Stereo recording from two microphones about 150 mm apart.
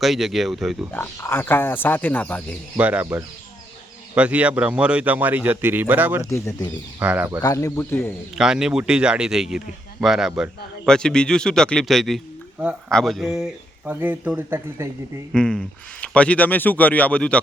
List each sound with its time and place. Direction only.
0.0 s speech: centre (ahead or behind)
0.9 s speech: 15° left (ahead or behind)
2.7 s speech: 10° right (ahead or behind)
6.3 s speech: 20° left (ahead or behind)
7.0 s speech: 10° right (ahead or behind)
7.4 s speech: 20° left (ahead or behind)
8.4 s speech: 5° right (ahead or behind)
13.8 s speech: 10° right (ahead or behind)
15.3 s speech: 5° left (ahead or behind)